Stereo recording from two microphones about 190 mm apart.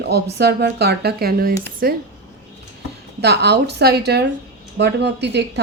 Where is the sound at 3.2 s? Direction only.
60° right (ahead or behind).